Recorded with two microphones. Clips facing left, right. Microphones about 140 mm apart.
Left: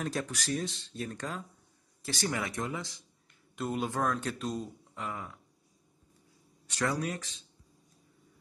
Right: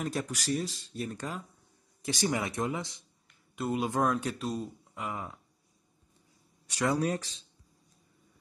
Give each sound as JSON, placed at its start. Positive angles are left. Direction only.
{"t": 0.0, "sound": "speech", "side_deg": -10}
{"t": 3.5, "sound": "speech", "side_deg": -5}
{"t": 7.0, "sound": "speech", "side_deg": -35}